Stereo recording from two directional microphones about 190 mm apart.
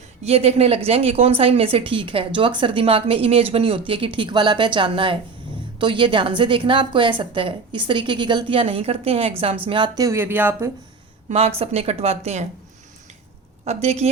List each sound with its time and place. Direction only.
0.2 s a woman's voice: 35° right (ahead or behind); by 10.7 s 10° right (ahead or behind)
11.3 s speech: 30° right (ahead or behind)
13.8 s speech: 35° right (ahead or behind)